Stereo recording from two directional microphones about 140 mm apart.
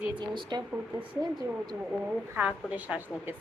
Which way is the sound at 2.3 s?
10° right (ahead or behind).